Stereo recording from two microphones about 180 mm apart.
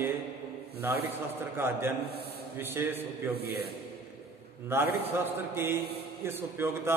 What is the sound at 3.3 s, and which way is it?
Speech, 60° right (ahead or behind).